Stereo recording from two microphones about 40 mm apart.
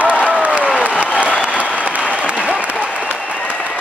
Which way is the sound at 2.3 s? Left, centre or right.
Right.